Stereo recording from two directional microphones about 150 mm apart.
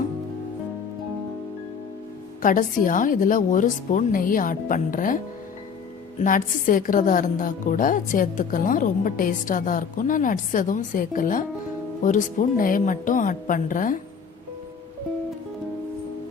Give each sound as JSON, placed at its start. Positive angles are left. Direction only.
{"t": 2.4, "sound": "a woman's voice", "side_deg": 65}
{"t": 6.2, "sound": "a woman's voice", "side_deg": 65}